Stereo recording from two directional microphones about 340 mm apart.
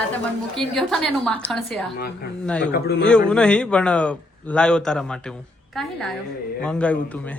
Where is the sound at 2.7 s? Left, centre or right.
Left.